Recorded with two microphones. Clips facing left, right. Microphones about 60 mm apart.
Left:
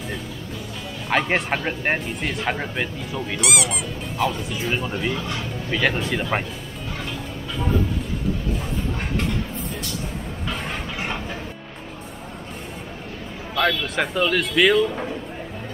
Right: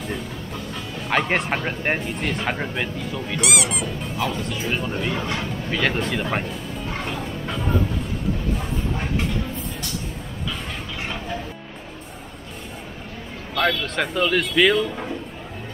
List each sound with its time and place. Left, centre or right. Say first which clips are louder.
1.0 s speech: even; centre
5.1 s speech: right 2 dB; right
5.7 s speech: left 1 dB; centre
11.0 s music: right 1 dB; centre
13.6 s speech: even; centre